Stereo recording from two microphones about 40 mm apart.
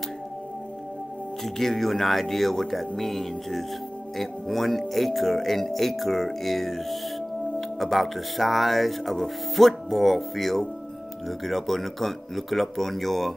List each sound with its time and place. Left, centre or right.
1.4 s speech: centre